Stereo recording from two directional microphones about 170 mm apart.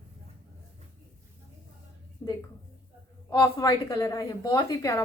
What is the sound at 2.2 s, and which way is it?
A woman's voice, 15° left (ahead or behind).